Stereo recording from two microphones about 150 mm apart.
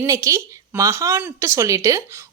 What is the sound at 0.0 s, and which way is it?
A woman's voice, 20° right (ahead or behind).